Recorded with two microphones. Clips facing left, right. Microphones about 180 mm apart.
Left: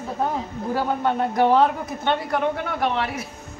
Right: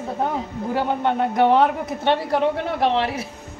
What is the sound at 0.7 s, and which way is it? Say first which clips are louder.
A man's voice: right 1 dB; 20° right (ahead or behind).